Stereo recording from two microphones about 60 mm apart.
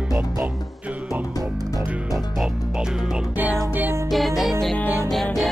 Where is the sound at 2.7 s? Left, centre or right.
Centre.